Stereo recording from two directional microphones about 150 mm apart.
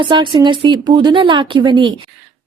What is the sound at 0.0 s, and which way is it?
Speech, 30° right (ahead or behind).